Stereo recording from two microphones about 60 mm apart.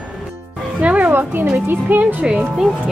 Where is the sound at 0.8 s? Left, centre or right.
Right.